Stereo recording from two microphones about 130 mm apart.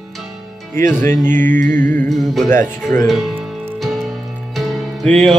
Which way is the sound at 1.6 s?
75° right (ahead or behind).